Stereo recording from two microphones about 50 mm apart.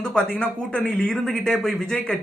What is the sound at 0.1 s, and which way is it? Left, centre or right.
Speech, centre.